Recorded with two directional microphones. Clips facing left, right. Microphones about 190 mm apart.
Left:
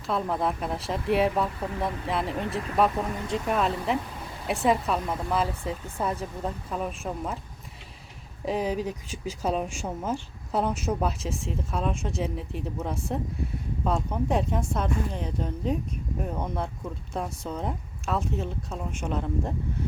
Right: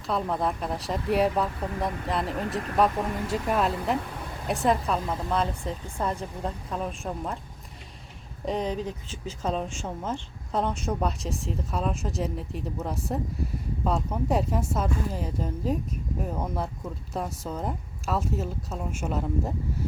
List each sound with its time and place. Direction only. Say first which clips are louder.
0.1 s speech: even; centre (ahead or behind)
8.4 s speech: left 1 dB; 5° left (ahead or behind)